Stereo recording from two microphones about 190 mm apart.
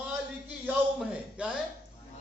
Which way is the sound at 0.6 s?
5° right (ahead or behind).